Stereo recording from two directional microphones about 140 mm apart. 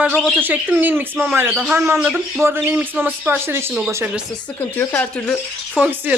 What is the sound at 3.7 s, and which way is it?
Speech, centre (ahead or behind).